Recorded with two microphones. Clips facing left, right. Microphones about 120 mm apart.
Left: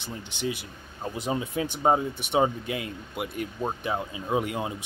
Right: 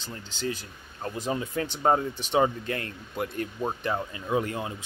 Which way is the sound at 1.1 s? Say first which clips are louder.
Left 1 dB; 15° left (ahead or behind).